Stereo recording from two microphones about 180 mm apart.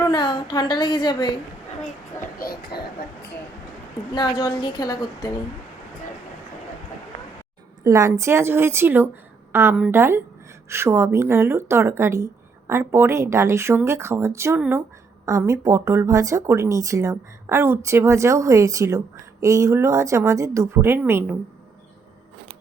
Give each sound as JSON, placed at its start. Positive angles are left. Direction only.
{"t": 0.1, "sound": "a woman's voice", "side_deg": 25}
{"t": 2.4, "sound": "speech", "side_deg": 60}
{"t": 4.1, "sound": "a woman's voice", "side_deg": 25}
{"t": 7.9, "sound": "speech", "side_deg": -15}